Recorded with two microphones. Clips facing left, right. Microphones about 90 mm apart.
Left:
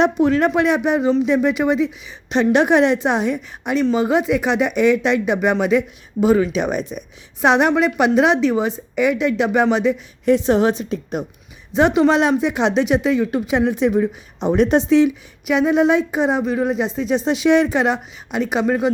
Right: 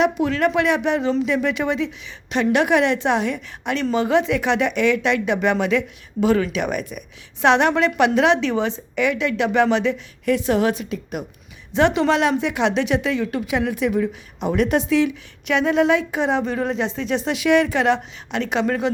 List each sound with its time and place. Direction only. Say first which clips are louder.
0.0 s speech: left 3 dB; 30° left (ahead or behind)
11.7 s speech: left 3 dB; 20° left (ahead or behind)
16.4 s speech: left 3 dB; 10° left (ahead or behind)